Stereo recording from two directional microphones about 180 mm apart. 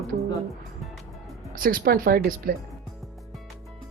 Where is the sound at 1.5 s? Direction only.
50° right (ahead or behind).